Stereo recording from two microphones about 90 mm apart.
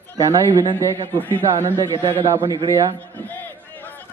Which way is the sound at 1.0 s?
70° right (ahead or behind).